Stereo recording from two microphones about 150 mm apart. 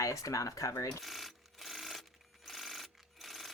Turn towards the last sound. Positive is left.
turn(degrees=0)  # may be behind; listen again after turning